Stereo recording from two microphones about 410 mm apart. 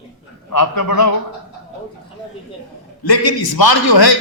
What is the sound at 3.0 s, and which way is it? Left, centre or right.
A man's voice, left.